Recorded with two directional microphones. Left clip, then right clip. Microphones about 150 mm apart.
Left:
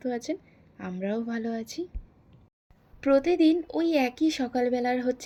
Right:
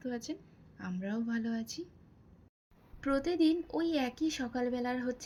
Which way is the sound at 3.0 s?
30° left (ahead or behind).